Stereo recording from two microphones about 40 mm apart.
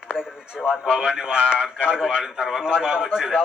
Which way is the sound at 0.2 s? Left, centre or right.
Centre.